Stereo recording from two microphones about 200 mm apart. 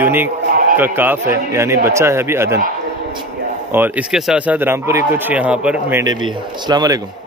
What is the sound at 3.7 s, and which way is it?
Speech, 10° right (ahead or behind).